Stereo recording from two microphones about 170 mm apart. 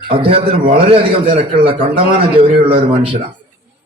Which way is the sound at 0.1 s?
30° right (ahead or behind).